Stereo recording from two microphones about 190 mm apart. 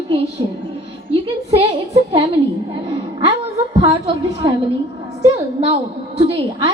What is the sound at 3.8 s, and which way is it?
Speech, 30° right (ahead or behind).